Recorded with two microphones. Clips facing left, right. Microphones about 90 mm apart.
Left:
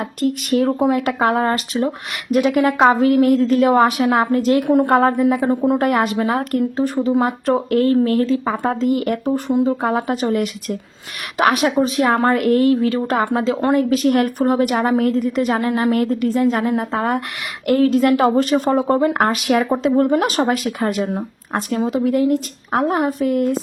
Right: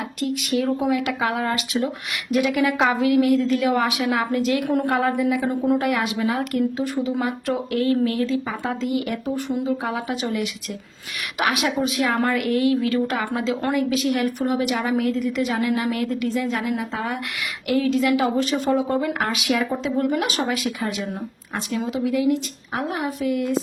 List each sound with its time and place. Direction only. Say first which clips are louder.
0.0 s a woman's voice: left 5 dB; 45° left (ahead or behind)
9.2 s speech: left 7 dB; 30° left (ahead or behind)
9.6 s a woman's voice: left 6 dB; 45° left (ahead or behind)